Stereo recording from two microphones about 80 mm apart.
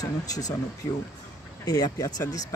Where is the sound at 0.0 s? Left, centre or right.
Left.